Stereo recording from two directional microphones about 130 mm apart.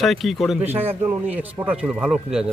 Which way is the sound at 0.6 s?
15° right (ahead or behind).